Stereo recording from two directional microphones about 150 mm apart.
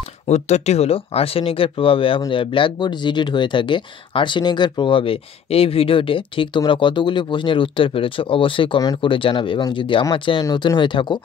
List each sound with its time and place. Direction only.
0.3 s speech: 45° left (ahead or behind); by 11.1 s 30° left (ahead or behind)